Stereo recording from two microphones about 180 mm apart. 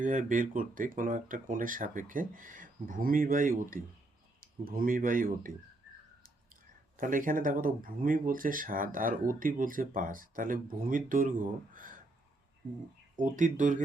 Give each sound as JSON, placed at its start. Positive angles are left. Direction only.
{"t": 0.0, "sound": "speech", "side_deg": -45}
{"t": 6.5, "sound": "speech", "side_deg": -50}
{"t": 13.1, "sound": "speech", "side_deg": -45}